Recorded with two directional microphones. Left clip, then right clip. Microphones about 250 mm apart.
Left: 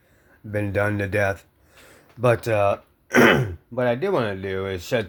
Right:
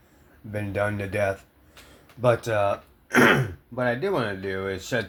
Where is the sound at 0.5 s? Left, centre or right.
Left.